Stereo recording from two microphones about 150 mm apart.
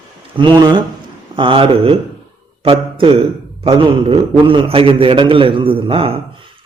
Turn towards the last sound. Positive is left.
turn(degrees=-35)  # may be behind; listen again after turning